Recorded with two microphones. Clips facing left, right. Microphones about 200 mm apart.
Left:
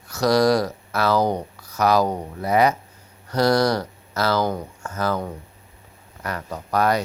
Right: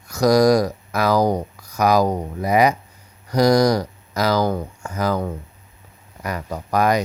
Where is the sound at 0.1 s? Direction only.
10° right (ahead or behind).